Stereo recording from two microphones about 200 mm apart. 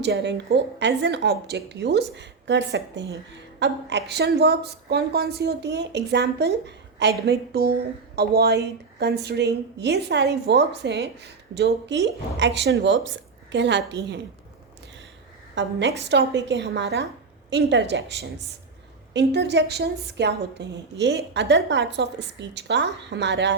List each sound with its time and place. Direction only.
0.0 s a woman's voice: 60° right (ahead or behind)
15.6 s a woman's voice: 60° right (ahead or behind)